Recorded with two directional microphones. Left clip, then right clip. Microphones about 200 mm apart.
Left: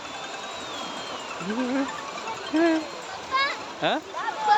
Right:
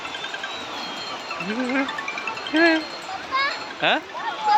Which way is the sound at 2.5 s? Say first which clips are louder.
Right 5 dB; centre (ahead or behind).